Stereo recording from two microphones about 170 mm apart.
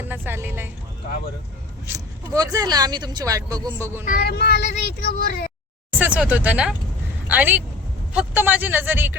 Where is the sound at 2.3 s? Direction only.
20° right (ahead or behind).